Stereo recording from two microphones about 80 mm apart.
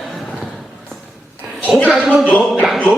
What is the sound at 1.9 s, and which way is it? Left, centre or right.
Speech, centre.